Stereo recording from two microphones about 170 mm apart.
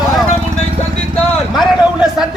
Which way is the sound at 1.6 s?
Centre (ahead or behind).